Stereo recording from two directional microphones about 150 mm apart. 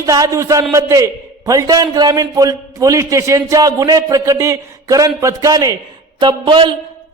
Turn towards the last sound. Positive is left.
turn(degrees=-35)  # may be behind; listen again after turning